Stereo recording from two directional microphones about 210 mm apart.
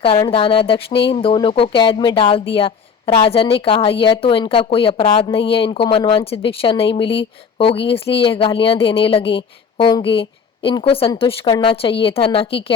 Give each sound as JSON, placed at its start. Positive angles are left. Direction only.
{"t": 0.0, "sound": "speech", "side_deg": 25}